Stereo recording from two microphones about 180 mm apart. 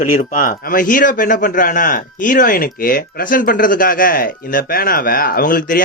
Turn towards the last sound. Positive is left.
turn(degrees=50)  # may be behind; listen again after turning